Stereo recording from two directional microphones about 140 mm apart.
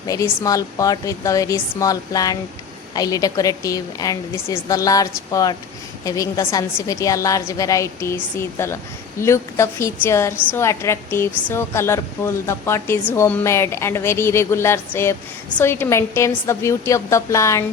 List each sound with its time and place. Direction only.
0.1 s a woman's voice: 25° left (ahead or behind)